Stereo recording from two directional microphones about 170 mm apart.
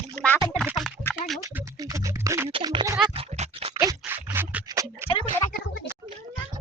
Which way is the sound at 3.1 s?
35° right (ahead or behind).